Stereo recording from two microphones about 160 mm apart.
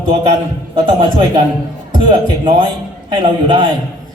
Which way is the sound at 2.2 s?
30° right (ahead or behind).